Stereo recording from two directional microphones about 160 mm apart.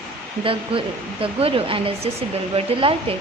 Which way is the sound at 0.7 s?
35° right (ahead or behind).